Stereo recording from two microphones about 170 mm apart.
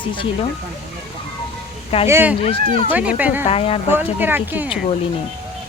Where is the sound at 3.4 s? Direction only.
35° left (ahead or behind).